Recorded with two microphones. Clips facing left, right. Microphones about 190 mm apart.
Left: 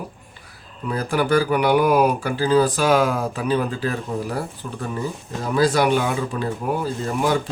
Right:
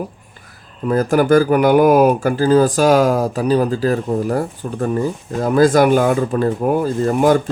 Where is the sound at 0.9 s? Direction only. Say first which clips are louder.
Right 7 dB; 45° right (ahead or behind).